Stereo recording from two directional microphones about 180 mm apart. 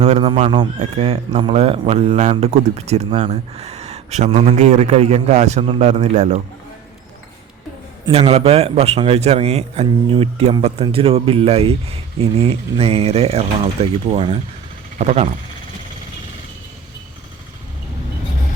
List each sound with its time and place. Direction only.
0.0 s speech: 35° right (ahead or behind)
8.0 s a man's voice: 25° right (ahead or behind)